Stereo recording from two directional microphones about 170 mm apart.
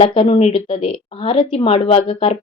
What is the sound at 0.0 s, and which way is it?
A woman's voice, 30° left (ahead or behind).